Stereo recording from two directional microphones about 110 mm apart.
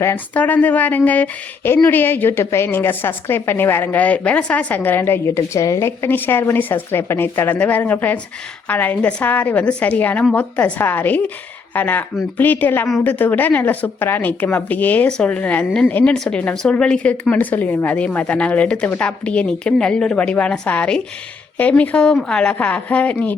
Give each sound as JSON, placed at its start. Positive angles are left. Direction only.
{"t": 0.3, "sound": "a woman's voice", "side_deg": 15}